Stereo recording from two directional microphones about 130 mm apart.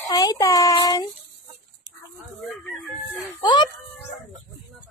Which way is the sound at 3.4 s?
35° left (ahead or behind).